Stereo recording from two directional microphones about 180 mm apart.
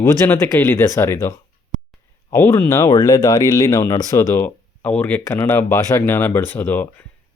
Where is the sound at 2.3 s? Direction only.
10° left (ahead or behind).